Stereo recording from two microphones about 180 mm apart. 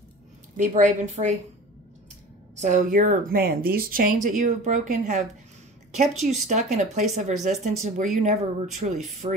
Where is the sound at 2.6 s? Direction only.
45° right (ahead or behind).